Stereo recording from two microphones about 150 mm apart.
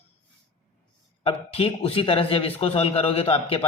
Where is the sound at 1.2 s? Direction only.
40° left (ahead or behind).